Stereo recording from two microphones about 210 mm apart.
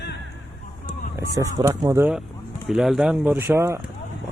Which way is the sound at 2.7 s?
Centre (ahead or behind).